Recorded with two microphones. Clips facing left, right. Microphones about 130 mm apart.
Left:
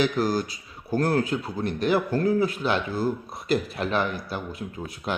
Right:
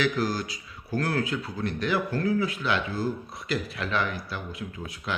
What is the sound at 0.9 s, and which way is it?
A man's voice, 40° left (ahead or behind).